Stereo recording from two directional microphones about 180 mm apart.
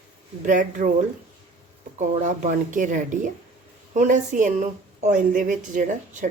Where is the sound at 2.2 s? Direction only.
45° right (ahead or behind).